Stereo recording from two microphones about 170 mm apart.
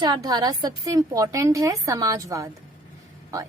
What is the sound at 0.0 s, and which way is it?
A woman's voice, 25° right (ahead or behind).